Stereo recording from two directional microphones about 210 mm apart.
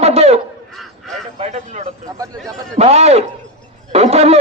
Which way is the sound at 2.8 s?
30° right (ahead or behind).